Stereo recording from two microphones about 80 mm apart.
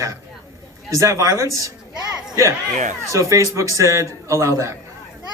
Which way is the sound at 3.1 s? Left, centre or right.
Right.